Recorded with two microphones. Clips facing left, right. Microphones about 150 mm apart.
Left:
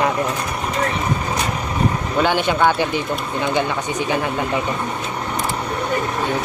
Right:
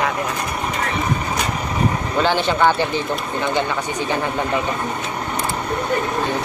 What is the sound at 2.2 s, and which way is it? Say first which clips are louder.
Speech: even; 15° left (ahead or behind).